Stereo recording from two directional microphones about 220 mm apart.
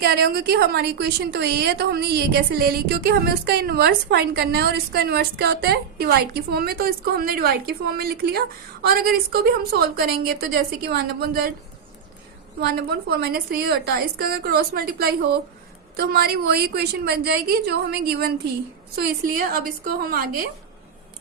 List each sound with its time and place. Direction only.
0.0 s a woman's voice: 45° right (ahead or behind)
12.5 s a woman's voice: 45° right (ahead or behind)
19.5 s a woman's voice: 40° right (ahead or behind)